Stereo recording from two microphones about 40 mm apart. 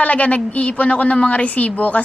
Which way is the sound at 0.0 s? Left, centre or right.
Left.